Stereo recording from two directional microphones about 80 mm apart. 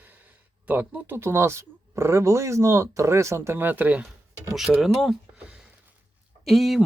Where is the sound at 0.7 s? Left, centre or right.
Right.